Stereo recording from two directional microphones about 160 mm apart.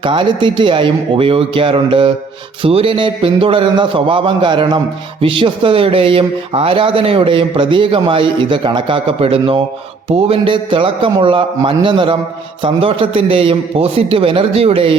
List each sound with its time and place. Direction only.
0.0 s speech: 30° right (ahead or behind)